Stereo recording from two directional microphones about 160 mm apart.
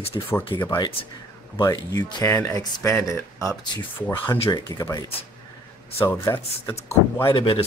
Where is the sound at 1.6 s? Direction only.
20° left (ahead or behind).